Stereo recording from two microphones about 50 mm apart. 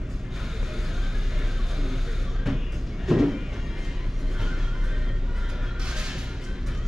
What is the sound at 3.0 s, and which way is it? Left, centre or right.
Vehicle, centre.